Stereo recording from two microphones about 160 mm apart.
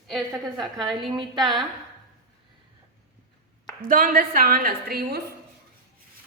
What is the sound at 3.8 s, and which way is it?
A woman's voice, 60° right (ahead or behind).